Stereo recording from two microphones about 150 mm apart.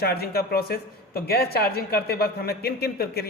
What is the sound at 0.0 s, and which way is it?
Speech, 90° left.